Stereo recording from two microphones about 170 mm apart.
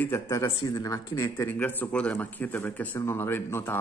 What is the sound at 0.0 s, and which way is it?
Speech, 15° left (ahead or behind).